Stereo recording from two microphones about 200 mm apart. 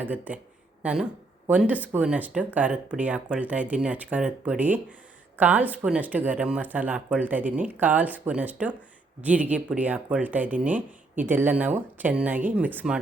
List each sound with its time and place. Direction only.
0.0 s speech: 10° right (ahead or behind)